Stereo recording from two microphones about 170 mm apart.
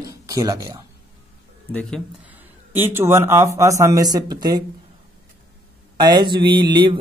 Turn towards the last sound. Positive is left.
turn(degrees=-25)  # may be behind; listen again after turning